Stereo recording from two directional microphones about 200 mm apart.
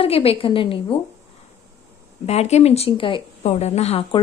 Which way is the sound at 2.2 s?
30° left (ahead or behind).